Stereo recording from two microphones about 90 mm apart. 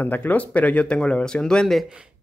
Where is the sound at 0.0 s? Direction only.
20° left (ahead or behind).